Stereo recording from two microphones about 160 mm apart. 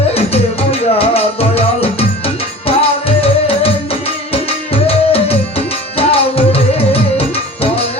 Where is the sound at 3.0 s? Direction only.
35° left (ahead or behind).